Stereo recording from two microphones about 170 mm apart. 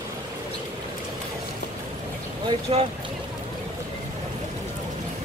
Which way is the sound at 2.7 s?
35° right (ahead or behind).